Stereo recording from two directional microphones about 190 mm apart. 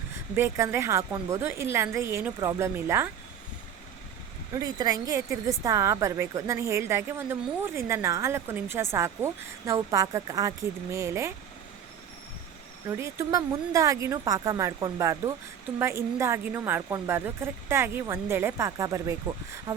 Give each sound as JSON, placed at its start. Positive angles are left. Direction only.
{"t": 0.3, "sound": "a woman's voice", "side_deg": -15}
{"t": 4.5, "sound": "a woman's voice", "side_deg": -20}
{"t": 12.9, "sound": "a woman's voice", "side_deg": -15}